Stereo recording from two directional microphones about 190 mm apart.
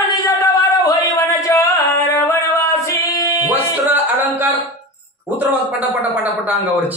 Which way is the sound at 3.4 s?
10° right (ahead or behind).